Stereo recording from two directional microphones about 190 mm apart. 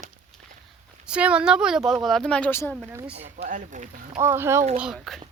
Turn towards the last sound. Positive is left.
turn(degrees=0)  # may be behind; listen again after turning